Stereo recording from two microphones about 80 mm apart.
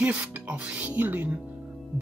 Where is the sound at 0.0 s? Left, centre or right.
Centre.